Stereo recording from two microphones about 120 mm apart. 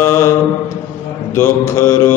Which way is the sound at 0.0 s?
25° left (ahead or behind).